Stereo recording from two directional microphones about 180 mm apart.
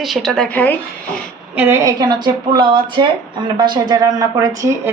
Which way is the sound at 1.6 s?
15° right (ahead or behind).